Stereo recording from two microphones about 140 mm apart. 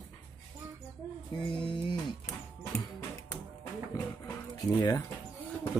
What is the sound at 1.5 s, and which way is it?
Music, 35° left (ahead or behind).